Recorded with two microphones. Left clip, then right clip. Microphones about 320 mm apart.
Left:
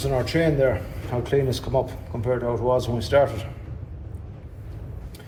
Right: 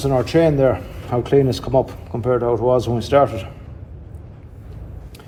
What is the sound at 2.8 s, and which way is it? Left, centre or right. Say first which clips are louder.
Speech: right 4 dB; right.